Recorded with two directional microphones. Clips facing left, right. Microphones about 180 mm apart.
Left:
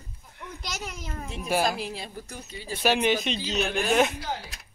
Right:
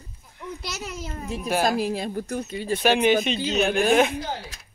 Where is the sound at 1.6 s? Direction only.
45° right (ahead or behind).